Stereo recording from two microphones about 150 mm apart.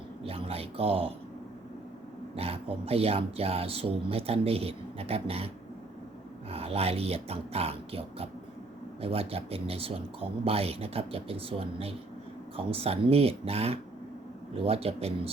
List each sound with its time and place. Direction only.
0.3 s speech: 40° right (ahead or behind)
2.3 s speech: 40° right (ahead or behind)
6.5 s speech: 40° right (ahead or behind)